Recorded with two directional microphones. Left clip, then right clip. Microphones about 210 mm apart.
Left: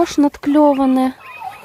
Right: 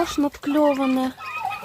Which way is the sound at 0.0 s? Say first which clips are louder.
Left 7 dB; 25° left (ahead or behind).